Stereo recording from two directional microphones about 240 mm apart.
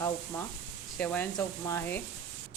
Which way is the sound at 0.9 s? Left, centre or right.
Centre.